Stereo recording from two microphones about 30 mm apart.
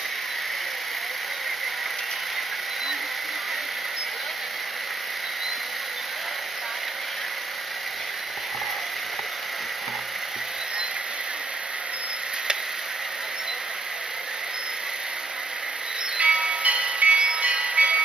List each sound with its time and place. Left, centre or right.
16.2 s music: right
17.4 s train: right